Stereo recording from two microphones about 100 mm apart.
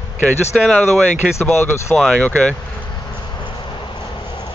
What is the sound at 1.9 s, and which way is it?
Speech, 5° left (ahead or behind).